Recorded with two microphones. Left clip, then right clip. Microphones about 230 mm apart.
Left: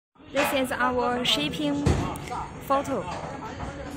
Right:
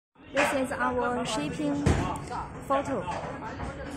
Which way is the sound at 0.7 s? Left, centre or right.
Left.